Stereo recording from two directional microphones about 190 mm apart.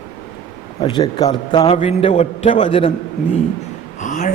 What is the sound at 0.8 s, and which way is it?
A man's voice, 25° left (ahead or behind).